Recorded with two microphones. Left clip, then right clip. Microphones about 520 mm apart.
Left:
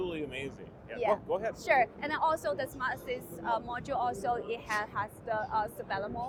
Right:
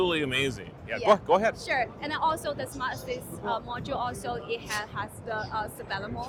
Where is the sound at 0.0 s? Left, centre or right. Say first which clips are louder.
Right 10 dB; right.